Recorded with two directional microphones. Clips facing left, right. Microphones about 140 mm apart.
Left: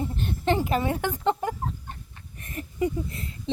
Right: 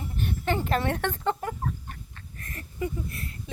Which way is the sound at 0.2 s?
20° left (ahead or behind).